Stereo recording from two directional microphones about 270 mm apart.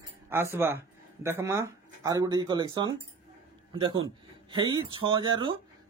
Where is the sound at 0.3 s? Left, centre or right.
Centre.